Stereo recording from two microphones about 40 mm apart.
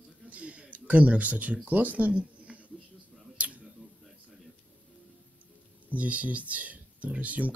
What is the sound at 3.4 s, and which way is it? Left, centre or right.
Scissors, right.